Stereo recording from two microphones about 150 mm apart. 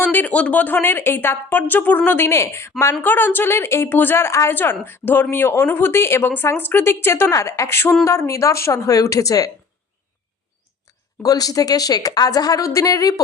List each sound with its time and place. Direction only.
0.0 s a woman's voice: 10° left (ahead or behind)
11.2 s a woman's voice: 25° left (ahead or behind)